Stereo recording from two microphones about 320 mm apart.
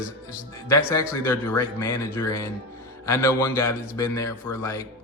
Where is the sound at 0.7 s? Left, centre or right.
Centre.